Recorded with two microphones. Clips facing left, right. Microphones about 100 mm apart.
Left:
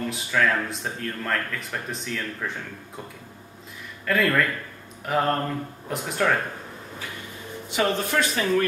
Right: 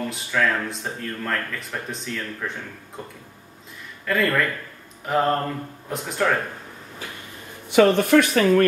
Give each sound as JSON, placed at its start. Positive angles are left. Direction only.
{"t": 0.1, "sound": "speech", "side_deg": 0}
{"t": 4.0, "sound": "speech", "side_deg": 0}
{"t": 7.7, "sound": "speech", "side_deg": -60}